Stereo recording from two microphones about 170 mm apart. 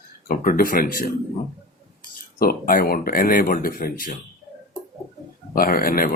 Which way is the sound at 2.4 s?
55° left (ahead or behind).